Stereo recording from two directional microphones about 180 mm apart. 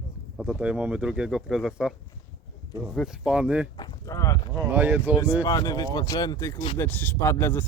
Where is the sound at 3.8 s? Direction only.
20° left (ahead or behind).